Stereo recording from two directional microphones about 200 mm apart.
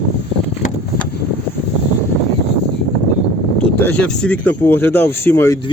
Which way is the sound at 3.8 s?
5° left (ahead or behind).